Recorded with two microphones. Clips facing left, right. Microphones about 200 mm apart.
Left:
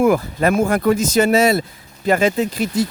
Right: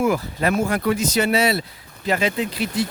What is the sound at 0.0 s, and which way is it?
Speech, 50° left (ahead or behind).